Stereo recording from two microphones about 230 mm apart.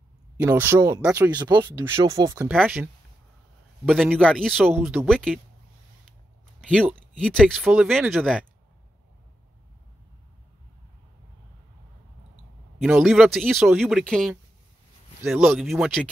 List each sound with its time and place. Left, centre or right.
0.4 s speech: centre
1.4 s speech: centre
6.7 s speech: centre
12.8 s speech: centre